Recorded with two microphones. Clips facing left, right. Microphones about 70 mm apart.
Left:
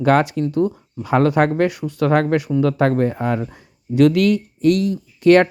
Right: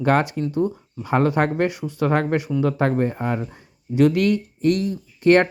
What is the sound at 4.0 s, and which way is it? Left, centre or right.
Speech, left.